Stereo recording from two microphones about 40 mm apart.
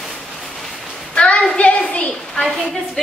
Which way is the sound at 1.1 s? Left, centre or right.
Left.